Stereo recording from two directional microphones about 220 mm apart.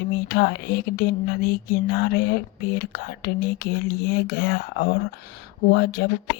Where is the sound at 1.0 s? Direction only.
45° left (ahead or behind).